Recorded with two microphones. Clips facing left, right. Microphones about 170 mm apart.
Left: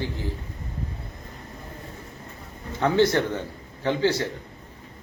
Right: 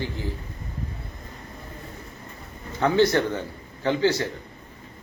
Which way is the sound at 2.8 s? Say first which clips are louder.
Right 1 dB; 20° left (ahead or behind).